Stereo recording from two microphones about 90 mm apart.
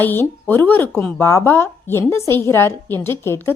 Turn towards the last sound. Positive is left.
turn(degrees=25)  # may be behind; listen again after turning